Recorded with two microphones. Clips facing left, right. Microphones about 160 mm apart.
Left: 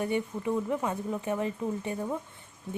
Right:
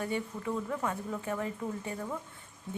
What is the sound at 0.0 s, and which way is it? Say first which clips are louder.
Speech: left 4 dB; 20° left (ahead or behind).